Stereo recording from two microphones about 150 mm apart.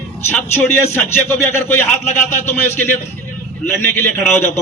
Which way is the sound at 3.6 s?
15° left (ahead or behind).